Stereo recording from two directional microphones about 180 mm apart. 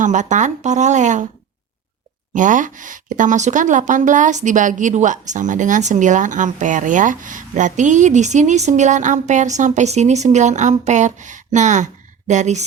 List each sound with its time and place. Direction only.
0.0 s speech: 45° right (ahead or behind)
2.3 s a woman's voice: 45° right (ahead or behind)